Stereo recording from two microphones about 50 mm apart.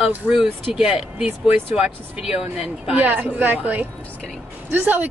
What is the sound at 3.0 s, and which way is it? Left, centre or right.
Speech, right.